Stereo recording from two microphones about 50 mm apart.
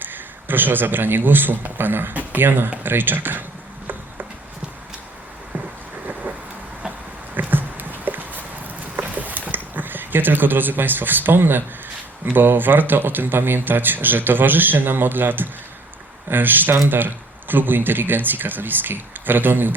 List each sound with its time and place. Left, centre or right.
0.0 s speech: right
7.3 s a sound: right
12.2 s speech: right